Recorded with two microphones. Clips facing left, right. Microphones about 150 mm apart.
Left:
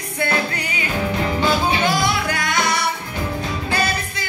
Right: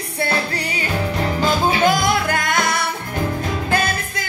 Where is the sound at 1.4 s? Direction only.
45° right (ahead or behind).